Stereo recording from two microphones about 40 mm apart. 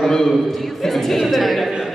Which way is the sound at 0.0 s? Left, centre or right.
Centre.